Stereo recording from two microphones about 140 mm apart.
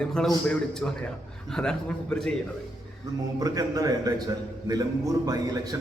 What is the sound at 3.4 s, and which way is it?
A man's voice, 25° right (ahead or behind).